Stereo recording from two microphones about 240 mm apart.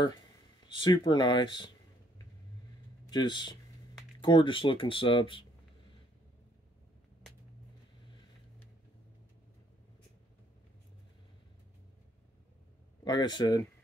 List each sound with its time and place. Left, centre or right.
0.7 s speech: centre
3.1 s speech: centre
13.0 s speech: centre